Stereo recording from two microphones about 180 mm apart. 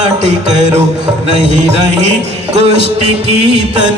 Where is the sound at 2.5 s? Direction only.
35° right (ahead or behind).